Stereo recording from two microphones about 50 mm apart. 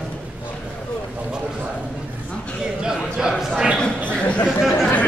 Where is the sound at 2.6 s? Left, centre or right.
Centre.